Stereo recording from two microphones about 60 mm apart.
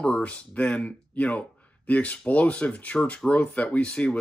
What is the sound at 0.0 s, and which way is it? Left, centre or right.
Speech, centre.